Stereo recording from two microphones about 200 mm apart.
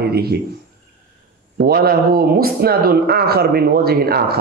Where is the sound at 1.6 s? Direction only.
50° right (ahead or behind).